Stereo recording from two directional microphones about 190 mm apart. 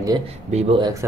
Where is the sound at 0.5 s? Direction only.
30° right (ahead or behind).